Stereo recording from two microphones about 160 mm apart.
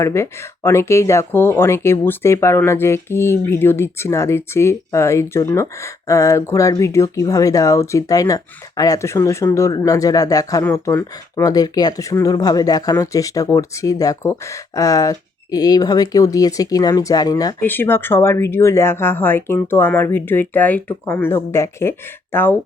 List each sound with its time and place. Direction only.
0.0 s speech: 15° left (ahead or behind)